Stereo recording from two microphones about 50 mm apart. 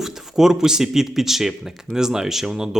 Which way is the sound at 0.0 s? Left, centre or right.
Centre.